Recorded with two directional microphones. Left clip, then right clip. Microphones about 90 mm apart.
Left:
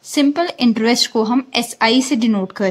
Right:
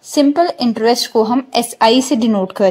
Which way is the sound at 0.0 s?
25° right (ahead or behind).